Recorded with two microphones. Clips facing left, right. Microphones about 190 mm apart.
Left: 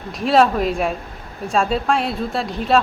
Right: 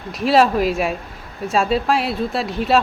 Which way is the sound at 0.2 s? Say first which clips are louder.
Even; centre (ahead or behind).